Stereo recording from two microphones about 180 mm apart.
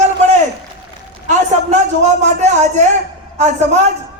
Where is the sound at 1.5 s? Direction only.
40° right (ahead or behind).